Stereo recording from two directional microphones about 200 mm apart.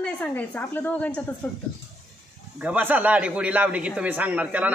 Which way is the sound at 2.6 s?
10° right (ahead or behind).